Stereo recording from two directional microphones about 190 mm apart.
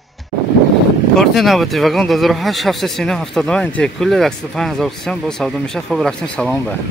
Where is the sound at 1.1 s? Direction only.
Centre (ahead or behind).